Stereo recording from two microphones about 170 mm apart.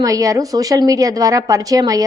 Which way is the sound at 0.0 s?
20° right (ahead or behind).